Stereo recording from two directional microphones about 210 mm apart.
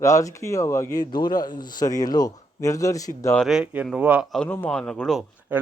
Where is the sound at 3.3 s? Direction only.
Centre (ahead or behind).